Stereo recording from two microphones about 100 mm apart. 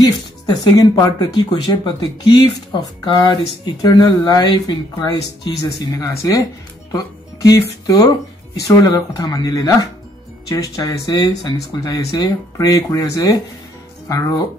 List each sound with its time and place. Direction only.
0.0 s speech: 40° left (ahead or behind)
7.4 s speech: 35° left (ahead or behind)